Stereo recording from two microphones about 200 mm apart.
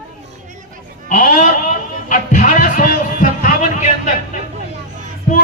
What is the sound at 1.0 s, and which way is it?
Speech, 40° left (ahead or behind).